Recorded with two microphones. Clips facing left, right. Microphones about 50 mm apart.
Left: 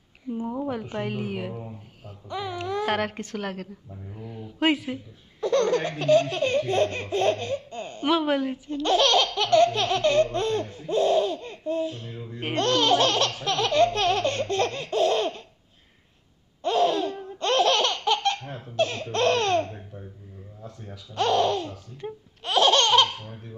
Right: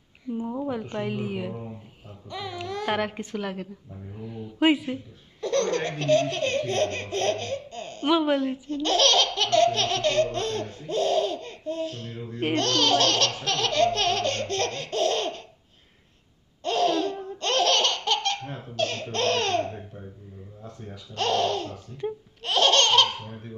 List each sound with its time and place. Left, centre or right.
0.4 s laughter: centre
1.0 s speech: left
2.2 s laughter: centre
3.2 s a woman's voice: left
5.4 s laughter: centre
8.1 s speech: left
8.8 s laughter: centre
16.6 s laughter: centre
18.4 s laughter: centre
18.8 s laughter: centre
19.6 s babbling: centre
21.1 s laughter: centre
23.0 s laughter: centre